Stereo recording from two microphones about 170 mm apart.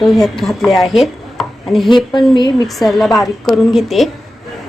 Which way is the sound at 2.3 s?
25° left (ahead or behind).